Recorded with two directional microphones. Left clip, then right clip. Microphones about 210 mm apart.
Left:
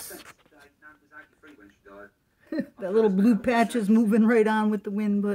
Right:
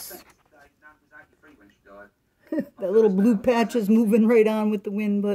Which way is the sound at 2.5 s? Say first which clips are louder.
Right 4 dB; 5° right (ahead or behind).